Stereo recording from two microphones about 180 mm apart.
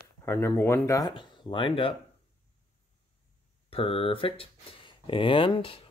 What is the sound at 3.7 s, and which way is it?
Speech, 30° left (ahead or behind).